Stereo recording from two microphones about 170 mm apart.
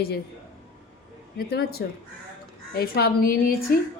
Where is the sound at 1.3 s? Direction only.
65° left (ahead or behind).